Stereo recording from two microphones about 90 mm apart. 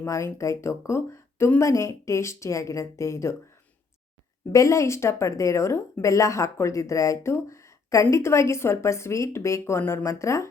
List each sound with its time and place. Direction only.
0.0 s speech: 30° left (ahead or behind)
4.5 s speech: 35° left (ahead or behind)